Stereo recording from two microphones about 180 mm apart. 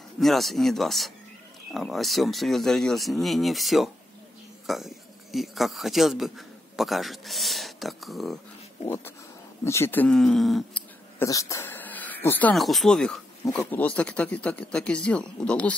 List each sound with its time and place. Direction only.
0.2 s speech: centre (ahead or behind)
8.8 s speech: 15° left (ahead or behind)
11.1 s speech: 20° left (ahead or behind)